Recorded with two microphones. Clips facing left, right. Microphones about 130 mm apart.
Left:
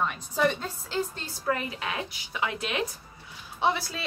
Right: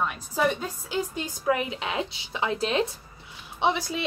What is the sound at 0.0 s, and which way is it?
A woman's voice, 5° right (ahead or behind).